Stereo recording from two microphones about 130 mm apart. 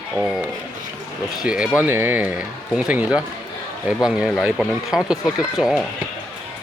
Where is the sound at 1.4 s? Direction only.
5° right (ahead or behind).